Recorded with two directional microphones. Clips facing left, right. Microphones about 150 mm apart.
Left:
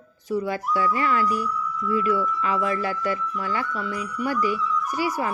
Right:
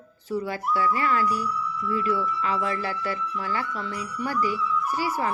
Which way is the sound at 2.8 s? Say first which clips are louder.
Left 3 dB; 20° left (ahead or behind).